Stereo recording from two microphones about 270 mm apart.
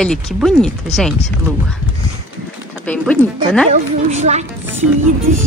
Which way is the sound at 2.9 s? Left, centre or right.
Centre.